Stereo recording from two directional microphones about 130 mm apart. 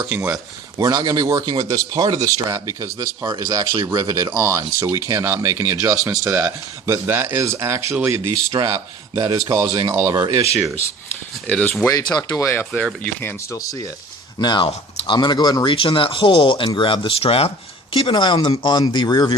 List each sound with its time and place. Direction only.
0.3 s speech: 30° right (ahead or behind)
8.5 s speech: 30° right (ahead or behind)
11.4 s speech: 5° left (ahead or behind)
11.9 s speech: 30° left (ahead or behind)
14.3 s speech: 35° left (ahead or behind)